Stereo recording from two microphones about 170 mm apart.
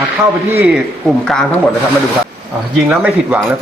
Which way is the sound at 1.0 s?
5° left (ahead or behind).